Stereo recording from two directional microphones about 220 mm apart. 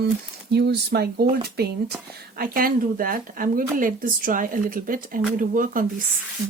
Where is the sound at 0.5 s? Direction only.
50° right (ahead or behind).